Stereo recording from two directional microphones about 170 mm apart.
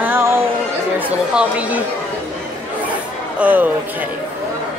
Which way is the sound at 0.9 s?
10° right (ahead or behind).